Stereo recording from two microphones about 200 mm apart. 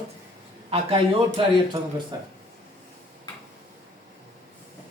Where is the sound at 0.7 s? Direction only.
30° right (ahead or behind).